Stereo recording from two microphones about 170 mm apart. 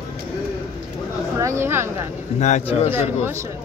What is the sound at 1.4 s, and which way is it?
Speech, 15° right (ahead or behind).